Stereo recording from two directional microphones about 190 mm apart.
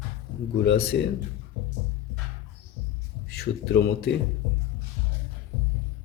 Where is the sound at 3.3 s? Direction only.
55° left (ahead or behind).